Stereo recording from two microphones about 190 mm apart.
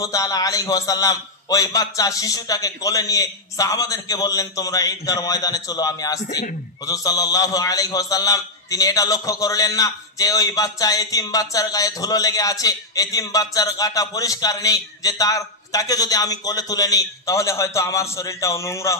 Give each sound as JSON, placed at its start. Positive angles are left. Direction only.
{"t": 0.0, "sound": "a man's voice", "side_deg": 20}